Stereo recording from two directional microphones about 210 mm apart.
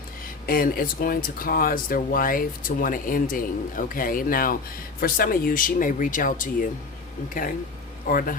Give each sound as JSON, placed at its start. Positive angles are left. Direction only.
{"t": 0.4, "sound": "a man's voice", "side_deg": 45}